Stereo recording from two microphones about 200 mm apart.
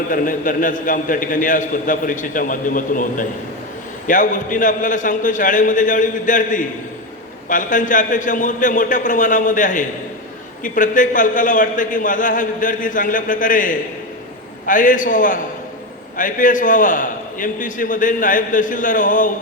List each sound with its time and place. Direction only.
0.1 s a man's voice: 40° left (ahead or behind)